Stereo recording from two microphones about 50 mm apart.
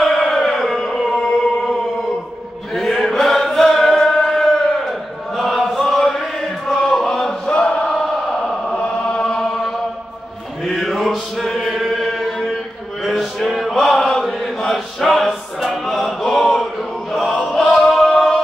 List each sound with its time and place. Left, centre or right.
0.0 s a sound: centre
2.7 s chant: centre
7.4 s chant: left
7.8 s choir: centre
8.7 s chant: centre
10.6 s mantra: centre
11.6 s chant: centre
17.2 s choir: centre